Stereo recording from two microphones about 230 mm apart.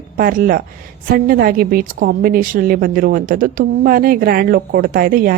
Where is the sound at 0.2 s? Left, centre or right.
Right.